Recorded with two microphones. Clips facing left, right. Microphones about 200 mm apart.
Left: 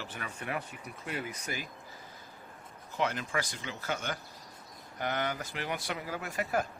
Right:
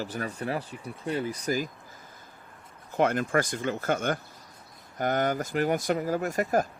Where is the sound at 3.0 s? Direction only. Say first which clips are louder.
Right 8 dB; 50° right (ahead or behind).